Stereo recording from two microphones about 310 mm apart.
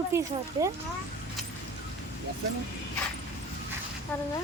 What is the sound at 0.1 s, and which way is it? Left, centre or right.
Speech, centre.